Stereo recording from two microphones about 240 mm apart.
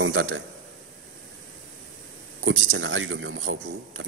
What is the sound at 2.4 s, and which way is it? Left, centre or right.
A man's voice, right.